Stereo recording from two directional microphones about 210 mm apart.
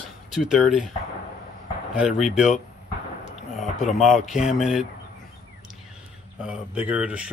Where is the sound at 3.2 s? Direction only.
35° left (ahead or behind).